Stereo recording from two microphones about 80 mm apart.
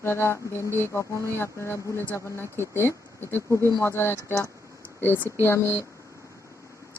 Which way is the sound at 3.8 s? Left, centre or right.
Left.